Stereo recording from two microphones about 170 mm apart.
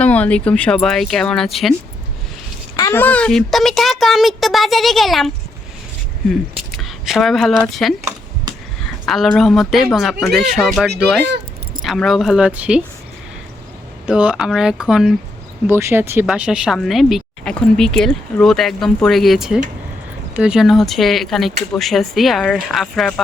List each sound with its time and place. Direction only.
0.0 s a woman's voice: 10° left (ahead or behind)
2.7 s speech: 15° left (ahead or behind); by 5.3 s centre (ahead or behind)
6.3 s speech: centre (ahead or behind)
8.5 s a sound: 25° right (ahead or behind)
9.0 s a woman's voice: centre (ahead or behind)
14.1 s a woman's voice: 5° right (ahead or behind)
15.6 s speech: 15° right (ahead or behind)
16.2 s a woman's voice: 5° right (ahead or behind)